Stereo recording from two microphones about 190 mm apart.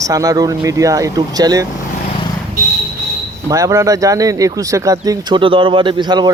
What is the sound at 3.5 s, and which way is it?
Speech, 15° right (ahead or behind).